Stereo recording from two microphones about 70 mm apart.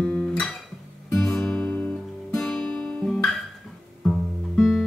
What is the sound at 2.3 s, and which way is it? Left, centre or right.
Music, centre.